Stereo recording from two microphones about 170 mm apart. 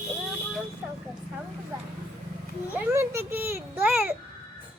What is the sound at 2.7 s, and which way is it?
A child's voice, 10° right (ahead or behind).